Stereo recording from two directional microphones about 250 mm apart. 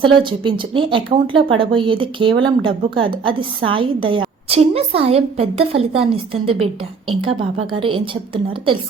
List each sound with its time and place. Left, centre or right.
0.0 s a woman's voice: centre